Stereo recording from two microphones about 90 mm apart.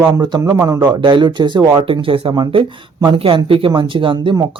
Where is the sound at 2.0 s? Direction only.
80° right; by 3.1 s 55° right (ahead or behind).